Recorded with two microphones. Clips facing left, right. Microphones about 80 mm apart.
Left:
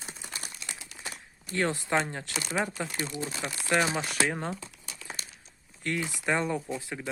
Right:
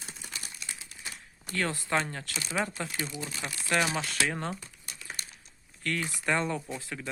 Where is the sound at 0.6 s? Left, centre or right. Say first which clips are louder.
Left 2 dB; left.